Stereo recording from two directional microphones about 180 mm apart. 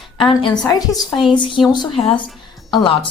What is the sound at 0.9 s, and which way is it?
Speech, centre (ahead or behind).